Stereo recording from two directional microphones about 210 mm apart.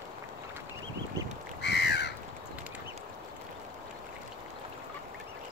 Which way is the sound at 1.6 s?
55° left (ahead or behind).